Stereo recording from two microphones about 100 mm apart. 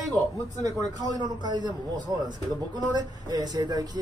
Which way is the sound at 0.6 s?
35° right (ahead or behind).